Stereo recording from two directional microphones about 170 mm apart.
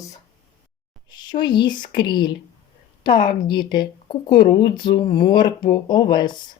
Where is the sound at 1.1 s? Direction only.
25° left (ahead or behind).